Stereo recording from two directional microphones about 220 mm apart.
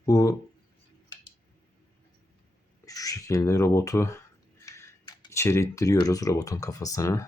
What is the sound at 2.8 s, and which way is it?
Speech, 15° left (ahead or behind).